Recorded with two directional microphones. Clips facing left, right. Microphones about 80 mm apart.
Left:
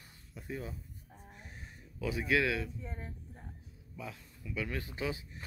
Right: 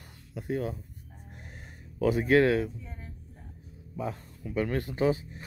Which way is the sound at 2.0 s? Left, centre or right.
Right.